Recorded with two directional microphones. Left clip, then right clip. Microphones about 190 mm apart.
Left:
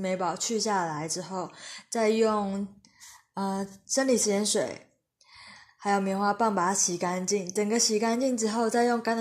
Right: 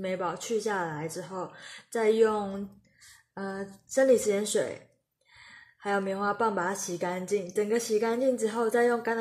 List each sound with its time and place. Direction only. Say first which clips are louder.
0.0 s a woman's voice: left 3 dB; 15° left (ahead or behind)